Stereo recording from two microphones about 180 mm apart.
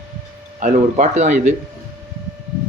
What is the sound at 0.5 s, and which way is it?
Speech, 45° right (ahead or behind).